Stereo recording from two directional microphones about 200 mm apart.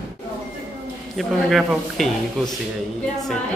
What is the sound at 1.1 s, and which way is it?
Speech, centre (ahead or behind).